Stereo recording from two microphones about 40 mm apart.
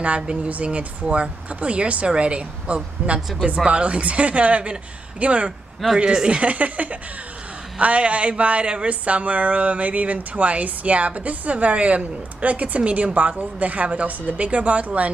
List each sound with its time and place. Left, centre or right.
0.0 s a woman's voice: right
6.4 s a woman's voice: right